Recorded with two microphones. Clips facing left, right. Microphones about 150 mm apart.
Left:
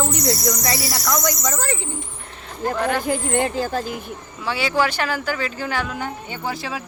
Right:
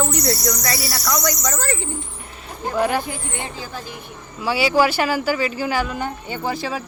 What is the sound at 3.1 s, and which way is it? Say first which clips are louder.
Speech: left 9 dB; 55° left (ahead or behind).